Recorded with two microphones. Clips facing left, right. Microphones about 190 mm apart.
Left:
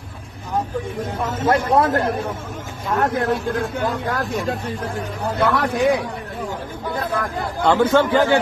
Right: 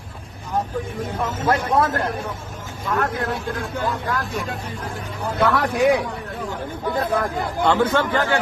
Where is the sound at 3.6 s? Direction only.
60° left (ahead or behind).